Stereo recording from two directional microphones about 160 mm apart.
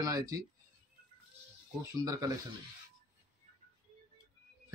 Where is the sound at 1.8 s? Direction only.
20° right (ahead or behind).